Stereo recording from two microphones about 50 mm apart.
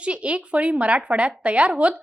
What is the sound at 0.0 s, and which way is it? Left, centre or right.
Speech, right.